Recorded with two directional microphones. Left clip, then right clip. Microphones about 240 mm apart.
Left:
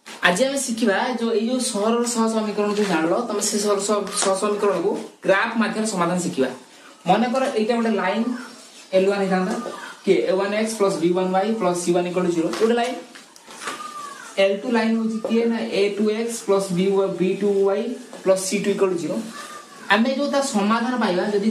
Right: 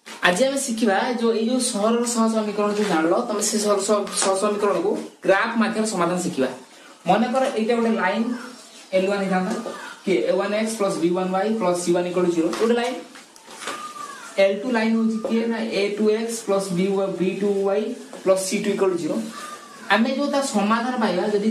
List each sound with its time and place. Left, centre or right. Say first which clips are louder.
0.2 s a woman's voice: even; centre
14.3 s a woman's voice: even; centre